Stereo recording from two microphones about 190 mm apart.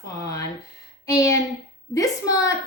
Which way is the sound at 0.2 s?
15° left (ahead or behind).